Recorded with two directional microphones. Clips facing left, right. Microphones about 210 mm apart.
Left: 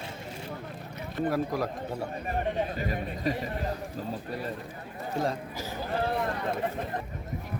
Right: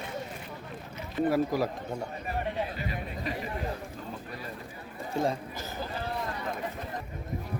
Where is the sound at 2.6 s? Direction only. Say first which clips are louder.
Left 3 dB; 45° left (ahead or behind).